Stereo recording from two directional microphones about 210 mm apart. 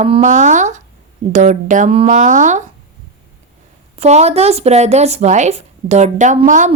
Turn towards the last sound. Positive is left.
turn(degrees=-35)  # may be behind; listen again after turning